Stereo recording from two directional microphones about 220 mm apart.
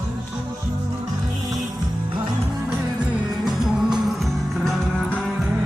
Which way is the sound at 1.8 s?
20° right (ahead or behind).